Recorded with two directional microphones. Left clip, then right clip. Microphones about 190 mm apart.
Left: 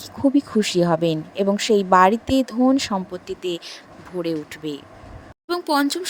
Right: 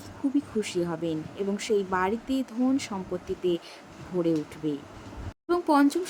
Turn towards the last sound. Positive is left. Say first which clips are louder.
# left 2 dB
turn(degrees=40)  # may be behind; listen again after turning